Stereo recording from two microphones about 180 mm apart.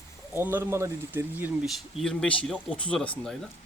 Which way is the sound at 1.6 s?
Centre (ahead or behind).